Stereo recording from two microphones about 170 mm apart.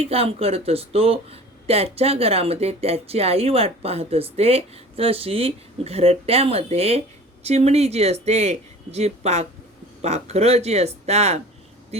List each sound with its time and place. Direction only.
0.0 s speech: 35° right (ahead or behind)